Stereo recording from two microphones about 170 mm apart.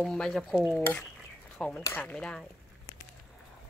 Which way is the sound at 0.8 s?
5° left (ahead or behind).